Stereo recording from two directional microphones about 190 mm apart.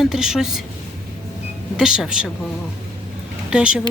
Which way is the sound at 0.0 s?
Centre (ahead or behind).